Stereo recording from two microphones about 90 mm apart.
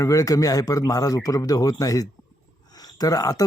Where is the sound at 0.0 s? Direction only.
40° left (ahead or behind).